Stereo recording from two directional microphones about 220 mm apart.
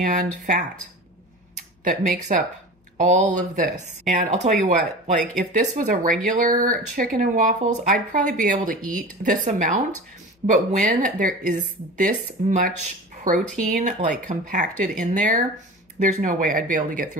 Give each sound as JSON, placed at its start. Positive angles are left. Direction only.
{"t": 0.0, "sound": "speech", "side_deg": -35}
{"t": 1.9, "sound": "speech", "side_deg": -35}